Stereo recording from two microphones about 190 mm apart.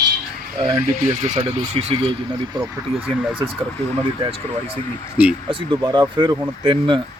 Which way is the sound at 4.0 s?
25° right (ahead or behind).